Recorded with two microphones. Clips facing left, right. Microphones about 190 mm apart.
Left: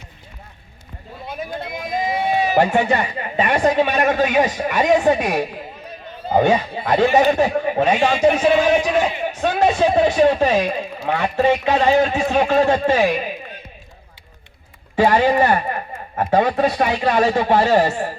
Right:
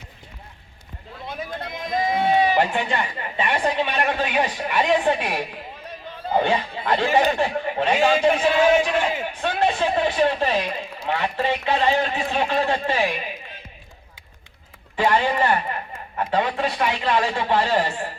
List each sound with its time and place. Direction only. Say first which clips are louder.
2.6 s speech: left 6 dB; 45° left (ahead or behind)
14.9 s speech: left 5 dB; 45° left (ahead or behind)